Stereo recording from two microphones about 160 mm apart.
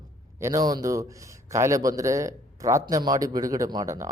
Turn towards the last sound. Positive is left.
turn(degrees=-20)  # may be behind; listen again after turning